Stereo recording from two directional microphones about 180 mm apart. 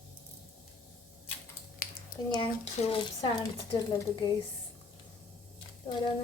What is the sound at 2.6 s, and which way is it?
Speech, 35° left (ahead or behind).